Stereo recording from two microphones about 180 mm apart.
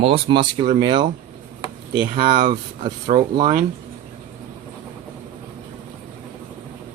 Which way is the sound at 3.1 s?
45° right (ahead or behind).